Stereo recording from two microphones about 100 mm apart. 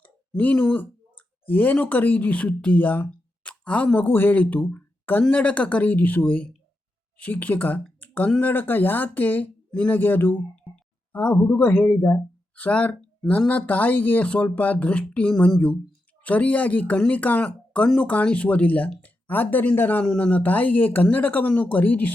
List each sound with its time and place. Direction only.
0.0 s speech: 15° left (ahead or behind)
8.0 s a sound: 15° left (ahead or behind)
8.4 s speech: 20° left (ahead or behind)